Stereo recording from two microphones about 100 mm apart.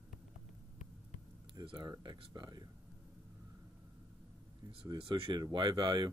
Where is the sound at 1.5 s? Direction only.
55° right (ahead or behind).